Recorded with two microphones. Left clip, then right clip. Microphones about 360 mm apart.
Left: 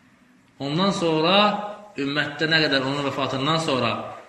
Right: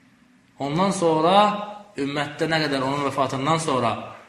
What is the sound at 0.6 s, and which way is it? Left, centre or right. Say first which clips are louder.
A man's voice: right 1 dB; centre.